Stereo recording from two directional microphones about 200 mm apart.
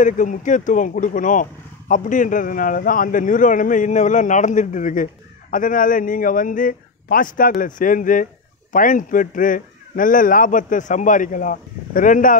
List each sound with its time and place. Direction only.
0.0 s speech: 40° left (ahead or behind)